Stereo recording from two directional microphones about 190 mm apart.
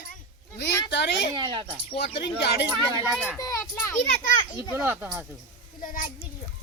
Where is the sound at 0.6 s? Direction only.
65° left (ahead or behind).